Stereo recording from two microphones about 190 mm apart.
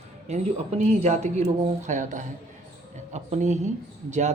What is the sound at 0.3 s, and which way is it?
Speech, 35° right (ahead or behind).